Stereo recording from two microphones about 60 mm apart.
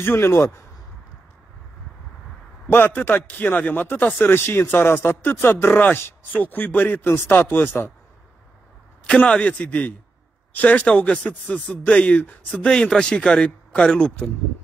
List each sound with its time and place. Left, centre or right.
0.0 s speech: left
2.7 s a man's voice: left
9.2 s a man's voice: left
12.6 s a man's voice: centre